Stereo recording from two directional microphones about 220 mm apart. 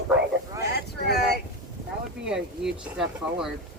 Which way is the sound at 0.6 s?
45° left (ahead or behind).